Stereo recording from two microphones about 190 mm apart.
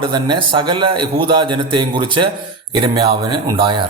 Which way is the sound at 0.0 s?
25° right (ahead or behind).